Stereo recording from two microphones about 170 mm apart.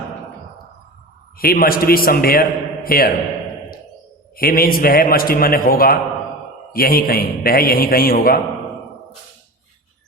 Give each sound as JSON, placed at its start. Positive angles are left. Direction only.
{"t": 1.4, "sound": "a man's voice", "side_deg": 60}
{"t": 4.4, "sound": "a man's voice", "side_deg": 60}